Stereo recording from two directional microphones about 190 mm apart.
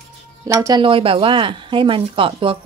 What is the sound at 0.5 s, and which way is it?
Speech, 20° right (ahead or behind).